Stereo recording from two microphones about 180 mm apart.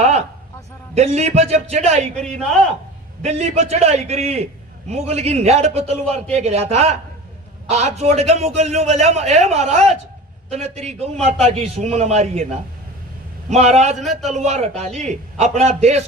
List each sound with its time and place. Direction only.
0.0 s a sound: 40° right (ahead or behind)
0.9 s a man's voice: 35° right (ahead or behind)
3.2 s a man's voice: 40° right (ahead or behind)
13.5 s a man's voice: 40° right (ahead or behind)
14.0 s a man's voice: centre (ahead or behind)
14.3 s a man's voice: 40° right (ahead or behind)